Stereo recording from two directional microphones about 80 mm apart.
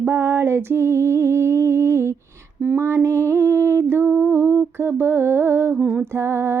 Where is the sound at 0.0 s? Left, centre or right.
Right.